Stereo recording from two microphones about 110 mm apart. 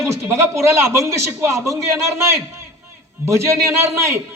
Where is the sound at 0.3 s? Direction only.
25° right (ahead or behind).